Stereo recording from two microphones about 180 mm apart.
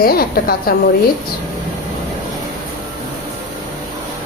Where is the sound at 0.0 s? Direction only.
55° left (ahead or behind).